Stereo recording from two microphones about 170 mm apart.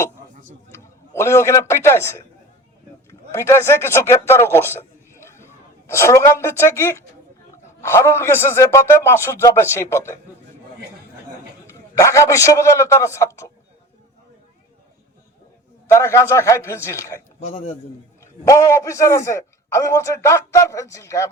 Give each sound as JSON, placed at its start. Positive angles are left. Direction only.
{"t": 0.7, "sound": "a man's voice", "side_deg": 15}
{"t": 11.6, "sound": "a man's voice", "side_deg": 15}
{"t": 15.9, "sound": "a man's voice", "side_deg": 15}
{"t": 18.2, "sound": "a man's voice", "side_deg": 15}